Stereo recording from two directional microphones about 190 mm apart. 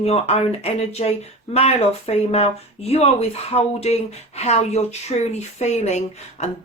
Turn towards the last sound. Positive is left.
turn(degrees=35)  # may be behind; listen again after turning